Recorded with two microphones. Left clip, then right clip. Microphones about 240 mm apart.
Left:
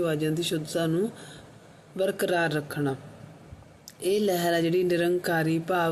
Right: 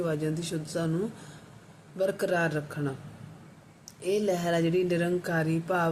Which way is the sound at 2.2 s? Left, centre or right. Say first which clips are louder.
Left 2 dB; centre.